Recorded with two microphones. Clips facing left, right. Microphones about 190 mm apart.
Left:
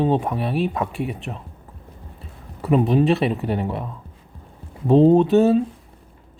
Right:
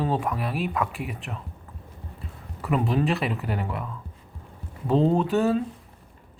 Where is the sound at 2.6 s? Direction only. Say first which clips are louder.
Left 7 dB; 25° left (ahead or behind).